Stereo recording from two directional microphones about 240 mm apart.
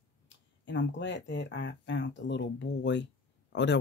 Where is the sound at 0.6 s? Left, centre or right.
Left.